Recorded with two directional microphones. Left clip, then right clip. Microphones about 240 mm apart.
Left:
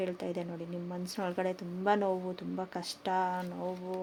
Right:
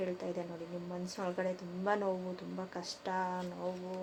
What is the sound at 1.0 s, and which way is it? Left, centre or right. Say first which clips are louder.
Speech: left 3 dB; left.